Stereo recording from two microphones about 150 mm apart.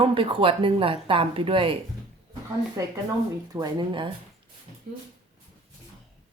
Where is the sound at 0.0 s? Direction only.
35° right (ahead or behind).